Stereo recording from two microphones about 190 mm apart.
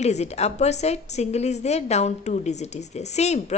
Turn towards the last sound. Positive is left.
turn(degrees=35)  # may be behind; listen again after turning